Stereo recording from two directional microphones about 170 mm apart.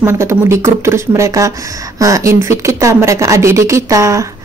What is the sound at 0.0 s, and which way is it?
A woman's voice, 15° right (ahead or behind).